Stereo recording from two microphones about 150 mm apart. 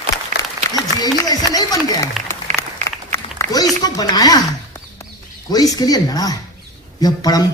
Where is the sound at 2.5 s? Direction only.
55° right (ahead or behind).